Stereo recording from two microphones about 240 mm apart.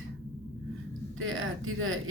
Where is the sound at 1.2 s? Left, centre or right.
Right.